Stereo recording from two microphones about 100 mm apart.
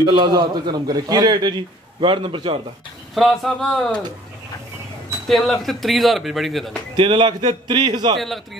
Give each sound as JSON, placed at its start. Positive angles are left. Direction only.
{"t": 0.1, "sound": "a man's voice", "side_deg": -45}
{"t": 2.0, "sound": "a man's voice", "side_deg": -60}
{"t": 3.2, "sound": "speech", "side_deg": 5}
{"t": 5.3, "sound": "speech", "side_deg": 0}
{"t": 7.0, "sound": "a man's voice", "side_deg": -55}